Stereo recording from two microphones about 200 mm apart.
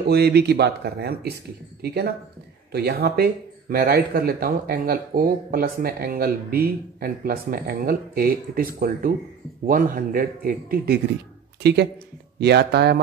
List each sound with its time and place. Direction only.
0.1 s speech: 55° right (ahead or behind)